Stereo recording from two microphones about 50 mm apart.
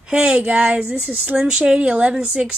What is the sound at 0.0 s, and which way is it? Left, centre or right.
Speech, centre.